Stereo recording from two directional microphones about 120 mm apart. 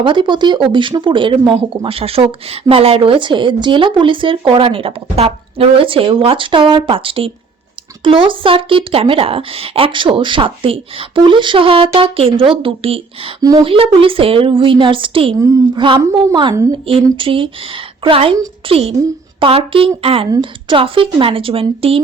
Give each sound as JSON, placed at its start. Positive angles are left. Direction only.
{"t": 0.0, "sound": "speech", "side_deg": -40}
{"t": 15.4, "sound": "a woman's voice", "side_deg": -25}
{"t": 16.1, "sound": "speech", "side_deg": -45}